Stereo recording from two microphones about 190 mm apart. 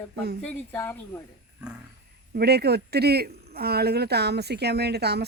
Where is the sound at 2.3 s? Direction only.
60° right (ahead or behind).